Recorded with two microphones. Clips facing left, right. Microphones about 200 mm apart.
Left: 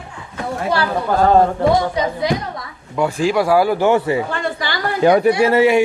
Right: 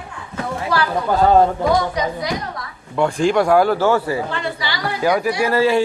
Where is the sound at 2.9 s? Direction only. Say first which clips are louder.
Right 1 dB; 5° left (ahead or behind).